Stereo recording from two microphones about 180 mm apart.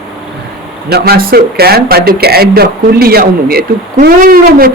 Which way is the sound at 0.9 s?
55° right (ahead or behind).